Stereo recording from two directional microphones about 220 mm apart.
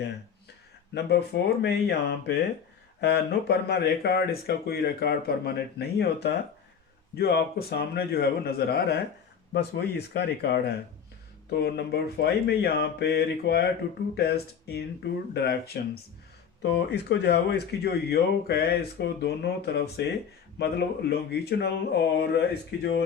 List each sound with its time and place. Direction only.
0.9 s speech: 50° left (ahead or behind)